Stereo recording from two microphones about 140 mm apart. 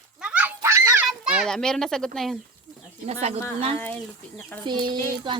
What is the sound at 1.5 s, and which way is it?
Speech, 5° left (ahead or behind).